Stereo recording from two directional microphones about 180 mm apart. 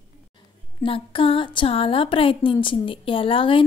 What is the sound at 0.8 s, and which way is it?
A woman's voice, 30° left (ahead or behind).